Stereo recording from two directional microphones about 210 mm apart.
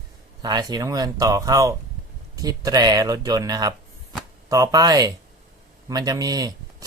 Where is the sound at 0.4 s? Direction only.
20° right (ahead or behind).